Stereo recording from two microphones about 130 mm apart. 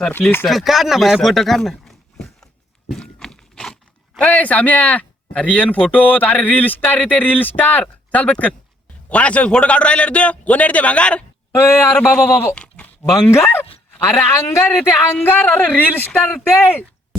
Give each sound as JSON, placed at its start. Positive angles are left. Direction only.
{"t": 0.1, "sound": "speech", "side_deg": 15}
{"t": 0.4, "sound": "speech", "side_deg": 0}
{"t": 2.9, "sound": "crunch", "side_deg": 5}
{"t": 5.8, "sound": "a man's voice", "side_deg": 15}